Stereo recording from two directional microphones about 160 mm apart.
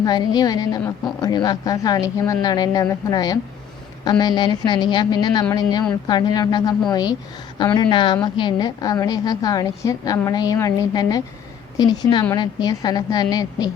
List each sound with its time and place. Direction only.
0.0 s a woman's voice: 25° left (ahead or behind)
12.3 s a woman's voice: 25° left (ahead or behind)